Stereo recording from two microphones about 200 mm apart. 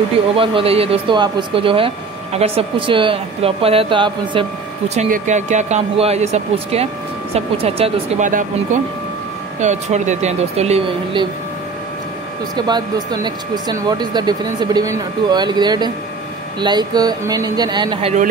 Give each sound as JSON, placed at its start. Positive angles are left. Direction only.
{"t": 0.4, "sound": "speech", "side_deg": -25}
{"t": 9.6, "sound": "speech", "side_deg": -35}
{"t": 12.5, "sound": "speech", "side_deg": -20}